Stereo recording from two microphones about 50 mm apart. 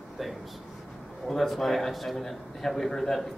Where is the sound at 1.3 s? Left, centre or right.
Centre.